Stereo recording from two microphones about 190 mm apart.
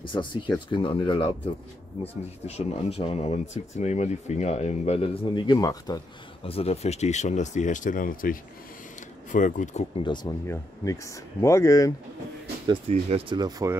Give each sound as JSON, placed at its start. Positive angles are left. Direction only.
{"t": 0.0, "sound": "speech", "side_deg": 25}
{"t": 2.4, "sound": "speech", "side_deg": 35}
{"t": 6.4, "sound": "speech", "side_deg": 30}
{"t": 10.0, "sound": "speech", "side_deg": 20}
{"t": 12.6, "sound": "speech", "side_deg": -30}
{"t": 13.4, "sound": "speech", "side_deg": -15}